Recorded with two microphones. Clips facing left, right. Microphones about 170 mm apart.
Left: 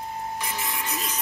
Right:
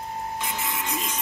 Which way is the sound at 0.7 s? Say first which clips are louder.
Right 1 dB; 10° right (ahead or behind).